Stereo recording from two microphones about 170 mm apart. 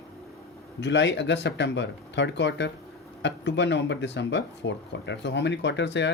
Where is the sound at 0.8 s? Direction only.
90° left.